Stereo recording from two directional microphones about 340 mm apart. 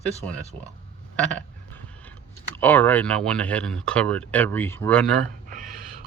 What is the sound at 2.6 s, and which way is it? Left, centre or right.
Speech, centre.